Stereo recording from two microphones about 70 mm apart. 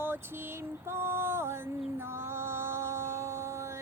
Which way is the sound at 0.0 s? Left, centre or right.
Right.